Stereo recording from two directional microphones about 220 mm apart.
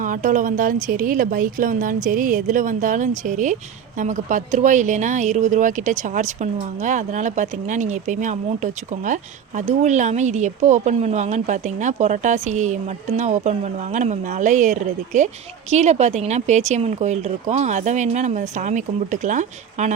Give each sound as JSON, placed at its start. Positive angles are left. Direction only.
{"t": 0.0, "sound": "a woman's voice", "side_deg": -35}